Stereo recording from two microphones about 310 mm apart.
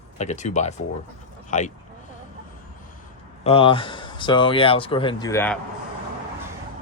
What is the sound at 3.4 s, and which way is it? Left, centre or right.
Speech, centre.